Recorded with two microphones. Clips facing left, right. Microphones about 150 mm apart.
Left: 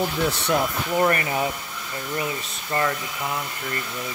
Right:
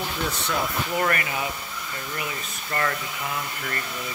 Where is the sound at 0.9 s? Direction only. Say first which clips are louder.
Left 5 dB; 30° left (ahead or behind).